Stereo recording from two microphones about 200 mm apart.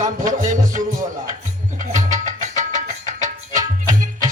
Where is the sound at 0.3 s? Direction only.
40° right (ahead or behind).